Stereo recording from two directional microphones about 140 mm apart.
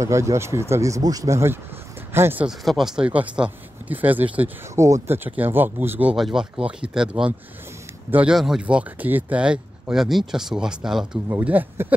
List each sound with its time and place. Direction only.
0.0 s speech: 20° right (ahead or behind)
2.4 s speech: centre (ahead or behind)
11.2 s speech: 15° right (ahead or behind)